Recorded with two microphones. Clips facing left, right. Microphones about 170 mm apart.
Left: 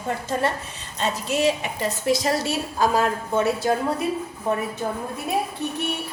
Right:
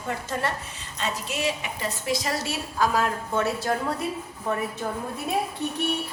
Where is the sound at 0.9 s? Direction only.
35° left (ahead or behind); by 3.9 s 20° left (ahead or behind).